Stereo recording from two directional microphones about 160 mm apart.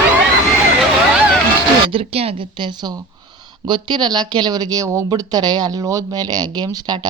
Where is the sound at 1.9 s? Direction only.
40° right (ahead or behind).